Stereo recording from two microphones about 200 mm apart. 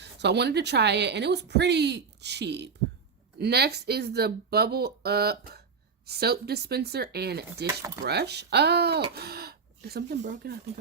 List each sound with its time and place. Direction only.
0.0 s a woman's voice: 60° right (ahead or behind)